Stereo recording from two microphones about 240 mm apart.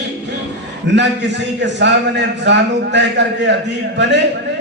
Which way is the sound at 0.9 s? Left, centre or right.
Right.